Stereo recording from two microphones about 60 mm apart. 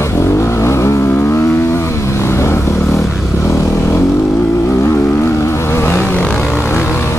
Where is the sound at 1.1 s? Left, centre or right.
Left.